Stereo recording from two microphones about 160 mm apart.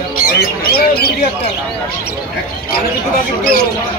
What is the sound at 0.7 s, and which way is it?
Bird, 75° left (ahead or behind).